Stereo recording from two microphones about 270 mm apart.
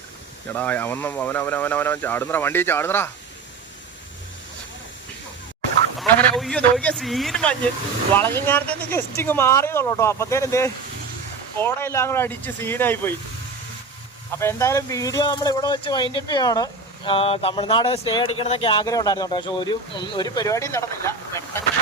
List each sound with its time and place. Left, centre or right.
0.5 s speech: centre
6.0 s a man's voice: centre
14.3 s speech: centre